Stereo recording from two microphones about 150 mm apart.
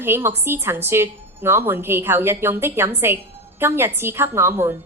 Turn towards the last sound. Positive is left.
turn(degrees=-15)  # may be behind; listen again after turning